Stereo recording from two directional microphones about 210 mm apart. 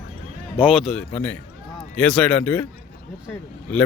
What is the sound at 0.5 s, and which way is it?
A man's voice, 5° right (ahead or behind).